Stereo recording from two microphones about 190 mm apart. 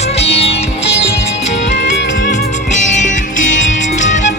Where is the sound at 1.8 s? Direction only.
65° left (ahead or behind).